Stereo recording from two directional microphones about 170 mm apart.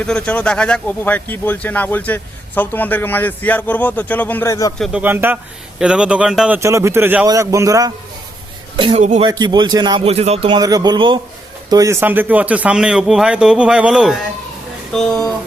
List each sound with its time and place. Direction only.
0.0 s speech: 5° left (ahead or behind)
4.8 s a man's voice: 5° right (ahead or behind)
6.6 s a man's voice: 15° right (ahead or behind)
8.9 s a man's voice: 40° right (ahead or behind)
9.2 s a man's voice: 25° right (ahead or behind)
10.6 s a man's voice: 20° right (ahead or behind); by 14.2 s 5° right (ahead or behind)